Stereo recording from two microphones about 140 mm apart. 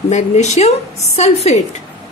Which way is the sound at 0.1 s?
55° left (ahead or behind).